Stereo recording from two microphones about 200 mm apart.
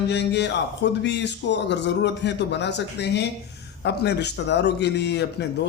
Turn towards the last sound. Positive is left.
turn(degrees=55)  # may be behind; listen again after turning